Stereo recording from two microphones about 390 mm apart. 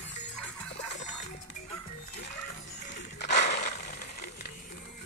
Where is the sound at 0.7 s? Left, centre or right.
Centre.